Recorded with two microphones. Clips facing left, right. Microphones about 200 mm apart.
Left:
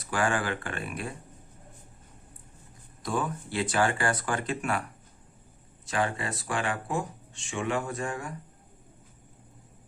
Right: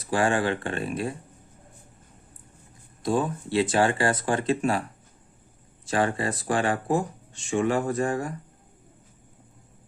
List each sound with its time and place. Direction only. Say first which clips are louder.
0.1 s speech: right 5 dB; 25° right (ahead or behind)
3.0 s speech: right 6 dB; 25° right (ahead or behind)
5.8 s speech: right 5 dB; 35° right (ahead or behind)